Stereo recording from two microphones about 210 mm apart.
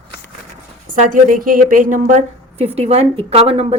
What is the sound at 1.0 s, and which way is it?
A woman's voice, 40° right (ahead or behind).